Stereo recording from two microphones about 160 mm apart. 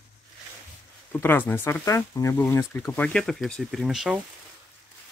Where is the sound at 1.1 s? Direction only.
10° left (ahead or behind); by 4.2 s 5° right (ahead or behind).